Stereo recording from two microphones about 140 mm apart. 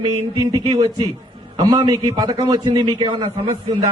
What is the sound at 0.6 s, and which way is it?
Speech, 45° right (ahead or behind).